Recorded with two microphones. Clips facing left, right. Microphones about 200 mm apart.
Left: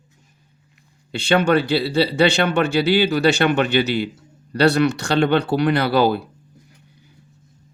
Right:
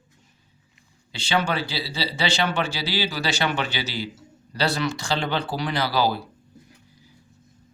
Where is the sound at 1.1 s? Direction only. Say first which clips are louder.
Left 8 dB; 60° left (ahead or behind).